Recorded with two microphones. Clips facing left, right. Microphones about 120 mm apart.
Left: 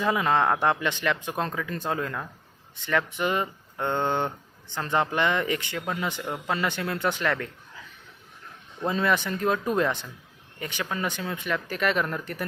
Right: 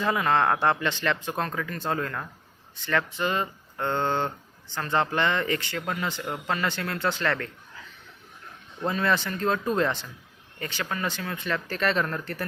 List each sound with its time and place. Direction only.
0.0 s speech: 15° left (ahead or behind)
8.9 s speech: 15° left (ahead or behind)